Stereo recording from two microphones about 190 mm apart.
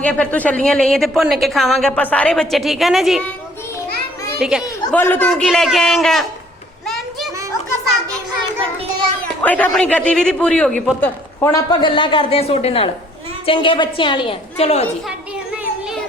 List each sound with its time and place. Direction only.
0.0 s a woman's voice: 5° left (ahead or behind)
4.4 s speech: 5° right (ahead or behind)
4.9 s a woman's voice: 10° left (ahead or behind)
6.8 s a sound: centre (ahead or behind)
9.4 s a man's voice: 10° left (ahead or behind); by 14.8 s 30° left (ahead or behind)